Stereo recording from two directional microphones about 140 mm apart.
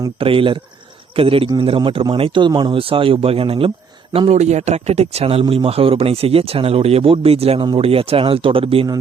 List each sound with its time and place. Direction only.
0.2 s speech: 40° right (ahead or behind)
4.3 s speech: 55° right (ahead or behind)